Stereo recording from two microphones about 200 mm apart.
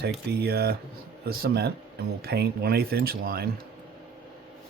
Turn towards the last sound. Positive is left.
turn(degrees=-50)  # may be behind; listen again after turning